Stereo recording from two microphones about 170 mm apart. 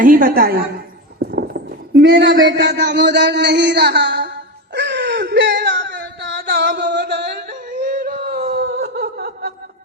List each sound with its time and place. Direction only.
0.0 s a woman's voice: 55° right (ahead or behind)
1.4 s speech: 75° right (ahead or behind)
4.7 s whimper: 90° right
7.7 s a sound: 50° right (ahead or behind); by 9.5 s 70° right (ahead or behind)